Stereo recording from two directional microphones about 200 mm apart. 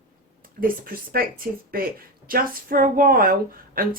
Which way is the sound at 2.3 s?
45° right (ahead or behind).